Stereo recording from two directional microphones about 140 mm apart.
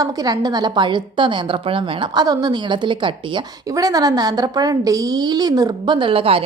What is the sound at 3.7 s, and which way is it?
A woman's voice, 25° right (ahead or behind).